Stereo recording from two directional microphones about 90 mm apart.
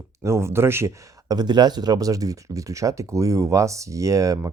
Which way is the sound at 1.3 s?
50° right (ahead or behind).